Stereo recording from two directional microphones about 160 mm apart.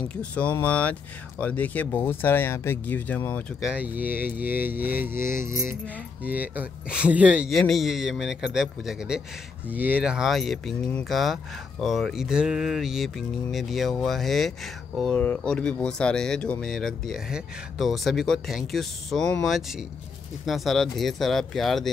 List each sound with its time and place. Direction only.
0.1 s speech: 10° left (ahead or behind)
3.6 s speech: 10° right (ahead or behind)